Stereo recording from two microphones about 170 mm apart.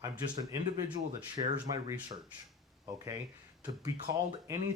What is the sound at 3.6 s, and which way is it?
Speech, 20° right (ahead or behind).